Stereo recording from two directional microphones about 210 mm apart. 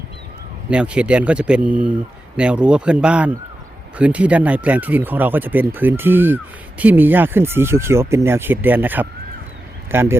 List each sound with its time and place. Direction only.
0.7 s a man's voice: 5° right (ahead or behind)